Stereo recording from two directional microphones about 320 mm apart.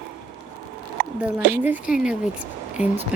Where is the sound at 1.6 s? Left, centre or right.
Centre.